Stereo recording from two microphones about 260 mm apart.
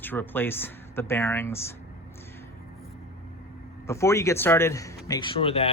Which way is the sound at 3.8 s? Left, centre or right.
Centre.